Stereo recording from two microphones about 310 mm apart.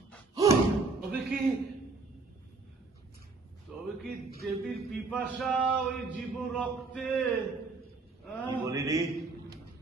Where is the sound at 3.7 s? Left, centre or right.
Centre.